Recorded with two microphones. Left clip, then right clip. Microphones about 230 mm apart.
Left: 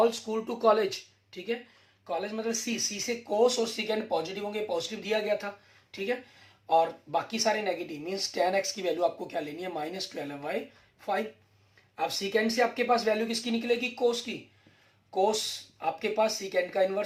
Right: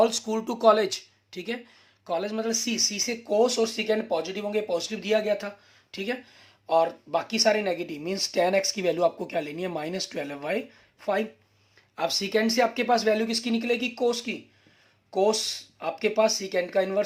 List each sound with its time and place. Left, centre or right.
0.0 s speech: right
6.7 s speech: right
11.9 s speech: right